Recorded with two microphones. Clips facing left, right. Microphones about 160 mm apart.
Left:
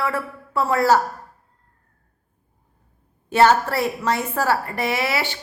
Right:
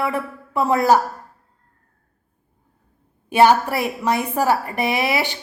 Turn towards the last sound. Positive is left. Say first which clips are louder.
# right 2 dB
turn(degrees=-15)  # may be behind; listen again after turning